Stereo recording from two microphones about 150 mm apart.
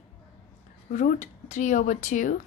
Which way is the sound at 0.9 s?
55° left (ahead or behind).